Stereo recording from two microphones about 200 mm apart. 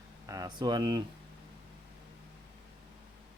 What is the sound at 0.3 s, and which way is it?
Speech, 20° right (ahead or behind).